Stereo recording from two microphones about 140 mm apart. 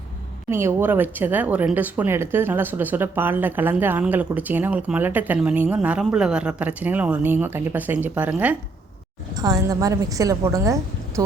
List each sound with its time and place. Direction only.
0.5 s speech: 15° right (ahead or behind)
9.3 s a woman's voice: 25° right (ahead or behind)